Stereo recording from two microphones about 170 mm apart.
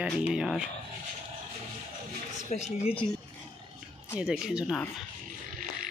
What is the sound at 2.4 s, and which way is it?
Speech, 45° left (ahead or behind).